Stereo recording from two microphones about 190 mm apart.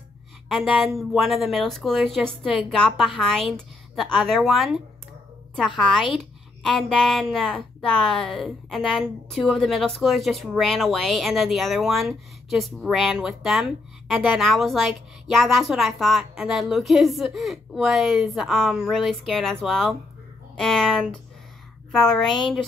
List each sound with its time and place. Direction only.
0.5 s a woman's voice: centre (ahead or behind)